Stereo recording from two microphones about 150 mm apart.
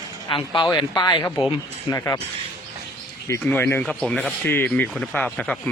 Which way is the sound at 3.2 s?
15° left (ahead or behind).